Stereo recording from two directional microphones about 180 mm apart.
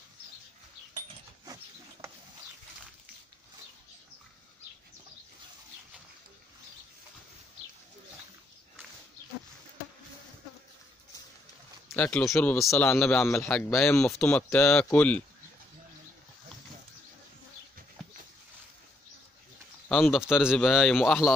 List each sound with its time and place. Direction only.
1.4 s a sound: 20° right (ahead or behind)
11.9 s speech: 10° left (ahead or behind)
19.9 s a man's voice: centre (ahead or behind)